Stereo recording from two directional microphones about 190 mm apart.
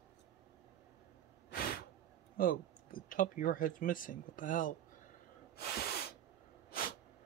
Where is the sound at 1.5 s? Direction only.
50° left (ahead or behind).